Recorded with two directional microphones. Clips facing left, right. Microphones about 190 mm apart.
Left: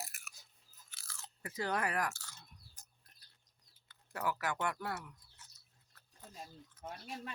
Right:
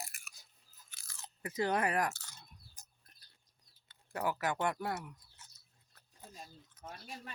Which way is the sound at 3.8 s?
20° right (ahead or behind).